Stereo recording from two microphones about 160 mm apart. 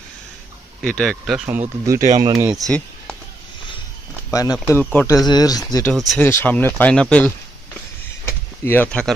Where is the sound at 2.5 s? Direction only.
5° left (ahead or behind).